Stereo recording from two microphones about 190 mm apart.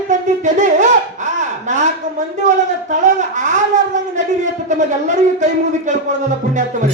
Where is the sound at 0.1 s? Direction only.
40° right (ahead or behind).